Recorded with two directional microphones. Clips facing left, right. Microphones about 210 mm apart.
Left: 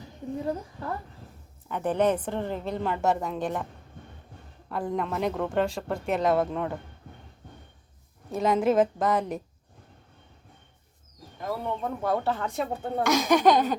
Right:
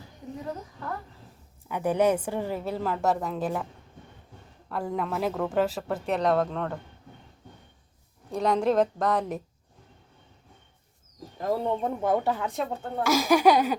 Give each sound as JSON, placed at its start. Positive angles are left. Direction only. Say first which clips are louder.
{"t": 1.6, "sound": "a woman's voice", "louder": "right 1 dB", "side_deg": -10}
{"t": 4.7, "sound": "a woman's voice", "louder": "left 1 dB", "side_deg": 0}
{"t": 8.3, "sound": "a woman's voice", "louder": "left 1 dB", "side_deg": 0}
{"t": 11.3, "sound": "a woman's voice", "louder": "right 4 dB", "side_deg": -35}